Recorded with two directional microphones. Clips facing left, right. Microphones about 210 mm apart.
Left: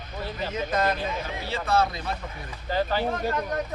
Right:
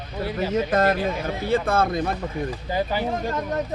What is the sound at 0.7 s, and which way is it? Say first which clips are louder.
Speech: right 2 dB; 45° right (ahead or behind).